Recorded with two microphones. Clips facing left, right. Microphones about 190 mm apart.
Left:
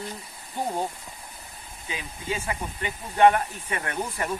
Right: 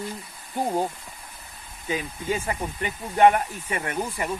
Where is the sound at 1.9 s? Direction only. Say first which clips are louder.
Right 5 dB; 45° right (ahead or behind).